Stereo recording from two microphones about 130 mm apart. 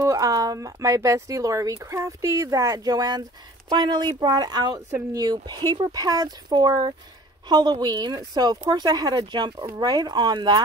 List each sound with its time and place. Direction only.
0.0 s speech: 25° right (ahead or behind)